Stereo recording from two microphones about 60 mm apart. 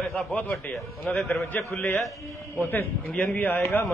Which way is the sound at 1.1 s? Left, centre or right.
Left.